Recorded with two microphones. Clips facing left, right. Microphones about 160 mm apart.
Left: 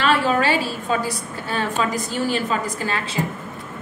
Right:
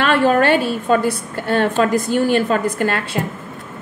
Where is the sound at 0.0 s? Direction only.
55° right (ahead or behind).